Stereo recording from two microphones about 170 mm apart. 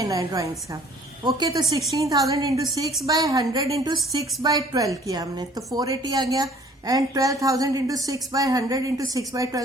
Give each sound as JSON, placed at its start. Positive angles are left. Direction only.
{"t": 0.0, "sound": "a woman's voice", "side_deg": -20}